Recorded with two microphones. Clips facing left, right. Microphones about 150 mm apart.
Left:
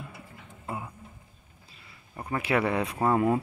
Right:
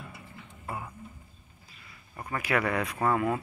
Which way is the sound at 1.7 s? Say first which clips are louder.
Even; 30° left (ahead or behind).